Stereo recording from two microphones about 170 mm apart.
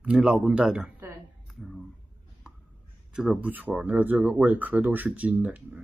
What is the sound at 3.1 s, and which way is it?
Speech, 5° right (ahead or behind).